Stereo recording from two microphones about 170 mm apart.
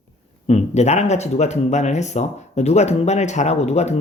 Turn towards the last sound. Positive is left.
turn(degrees=40)  # may be behind; listen again after turning